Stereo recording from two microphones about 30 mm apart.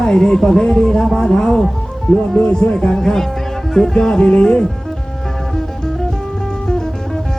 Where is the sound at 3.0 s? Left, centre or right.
Centre.